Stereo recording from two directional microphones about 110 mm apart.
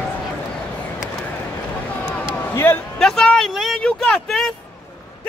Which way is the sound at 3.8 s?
5° left (ahead or behind).